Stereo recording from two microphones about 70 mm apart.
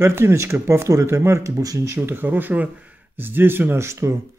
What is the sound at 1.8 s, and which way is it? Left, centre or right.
Speech, right.